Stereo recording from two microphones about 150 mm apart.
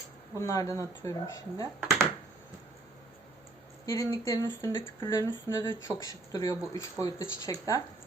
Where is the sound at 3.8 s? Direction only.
25° left (ahead or behind).